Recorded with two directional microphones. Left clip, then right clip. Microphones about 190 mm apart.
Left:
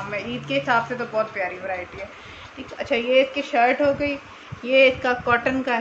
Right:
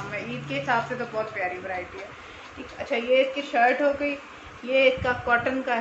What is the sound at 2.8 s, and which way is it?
Speech, 55° left (ahead or behind).